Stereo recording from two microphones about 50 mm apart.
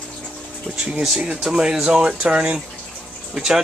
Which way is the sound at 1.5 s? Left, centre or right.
Centre.